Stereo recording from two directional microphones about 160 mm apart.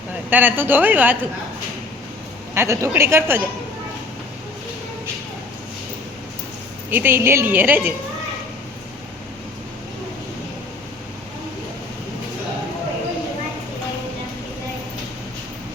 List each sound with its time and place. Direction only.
0.3 s a woman's voice: 10° right (ahead or behind)
2.6 s a woman's voice: 15° right (ahead or behind)
6.9 s a woman's voice: 15° right (ahead or behind)